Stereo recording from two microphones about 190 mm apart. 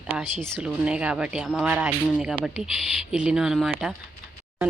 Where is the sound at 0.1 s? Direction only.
5° right (ahead or behind).